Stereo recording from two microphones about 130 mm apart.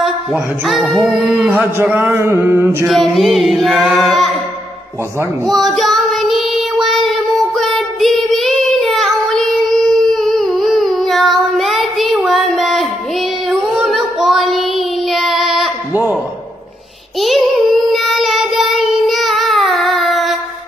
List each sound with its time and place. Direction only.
0.0 s a sound: centre (ahead or behind)
1.3 s music: 15° right (ahead or behind)
2.9 s music: centre (ahead or behind)
5.5 s child singing: centre (ahead or behind)
15.9 s a sound: 15° right (ahead or behind)
17.2 s child singing: centre (ahead or behind)